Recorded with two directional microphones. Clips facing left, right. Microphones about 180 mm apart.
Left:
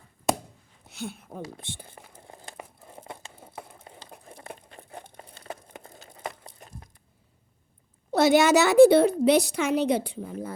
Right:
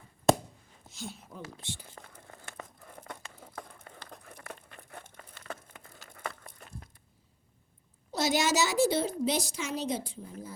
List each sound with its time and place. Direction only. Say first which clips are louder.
0.9 s a woman's voice: left 6 dB; 60° left (ahead or behind)
2.1 s crumpling: left 4 dB; 25° left (ahead or behind)
3.2 s a sound: left 2 dB; 25° left (ahead or behind)
3.6 s crumpling: left 2 dB; 15° left (ahead or behind); by 5.5 s 35° left (ahead or behind)
5.6 s a sound: left 7 dB; 35° left (ahead or behind)
6.1 s crumpling: left 3 dB; 20° left (ahead or behind)
8.1 s a woman's voice: left 9 dB; 60° left (ahead or behind)